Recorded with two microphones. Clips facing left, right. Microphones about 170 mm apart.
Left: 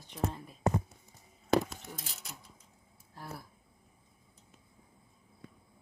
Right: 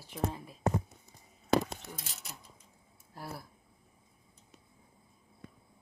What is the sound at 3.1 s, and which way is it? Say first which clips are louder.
Speech: right 3 dB; 10° right (ahead or behind).